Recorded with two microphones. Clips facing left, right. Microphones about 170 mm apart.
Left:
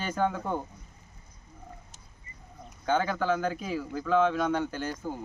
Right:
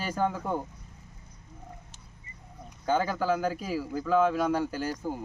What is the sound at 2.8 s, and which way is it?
Speech, 5° right (ahead or behind).